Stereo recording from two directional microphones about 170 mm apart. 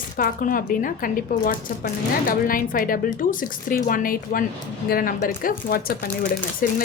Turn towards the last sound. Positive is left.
turn(degrees=55)  # may be behind; listen again after turning